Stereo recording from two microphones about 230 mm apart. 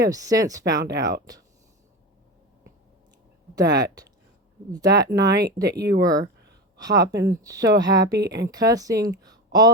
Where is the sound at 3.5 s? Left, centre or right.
Centre.